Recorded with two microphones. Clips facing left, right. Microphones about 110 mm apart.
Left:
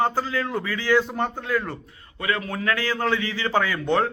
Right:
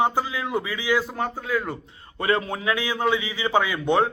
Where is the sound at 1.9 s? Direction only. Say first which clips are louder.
Right 4 dB; 30° right (ahead or behind).